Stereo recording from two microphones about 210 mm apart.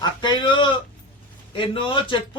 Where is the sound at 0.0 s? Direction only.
20° left (ahead or behind).